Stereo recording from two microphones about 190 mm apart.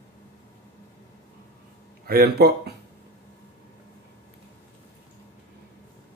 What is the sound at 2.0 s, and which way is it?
Speech, 55° right (ahead or behind).